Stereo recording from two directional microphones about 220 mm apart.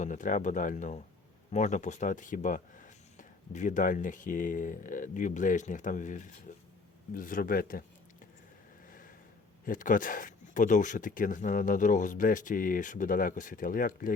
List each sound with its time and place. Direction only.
0.0 s speech: 35° left (ahead or behind)
8.9 s snort: 40° left (ahead or behind)
9.6 s speech: 35° left (ahead or behind)